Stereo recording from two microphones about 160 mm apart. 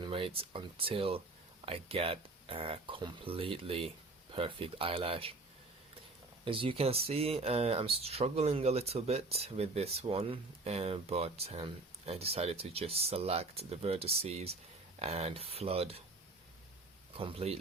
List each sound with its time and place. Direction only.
0.0 s speech: 35° right (ahead or behind)
6.4 s speech: 35° right (ahead or behind)
17.2 s speech: 35° right (ahead or behind)